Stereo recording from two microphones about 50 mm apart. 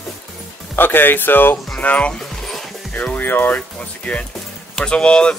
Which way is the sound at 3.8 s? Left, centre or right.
Left.